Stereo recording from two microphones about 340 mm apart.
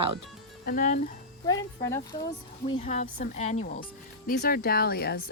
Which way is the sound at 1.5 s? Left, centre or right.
Centre.